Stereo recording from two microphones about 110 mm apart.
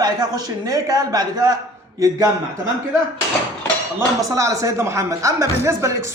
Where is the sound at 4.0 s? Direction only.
30° right (ahead or behind).